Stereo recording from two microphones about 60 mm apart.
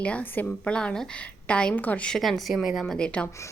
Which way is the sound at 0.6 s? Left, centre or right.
Centre.